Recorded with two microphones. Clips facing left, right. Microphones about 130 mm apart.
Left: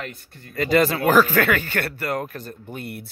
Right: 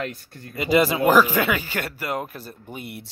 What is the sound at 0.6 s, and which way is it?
Speech, 10° right (ahead or behind).